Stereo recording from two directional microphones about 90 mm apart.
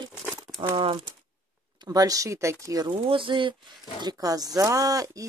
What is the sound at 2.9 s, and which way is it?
Speech, 70° right (ahead or behind).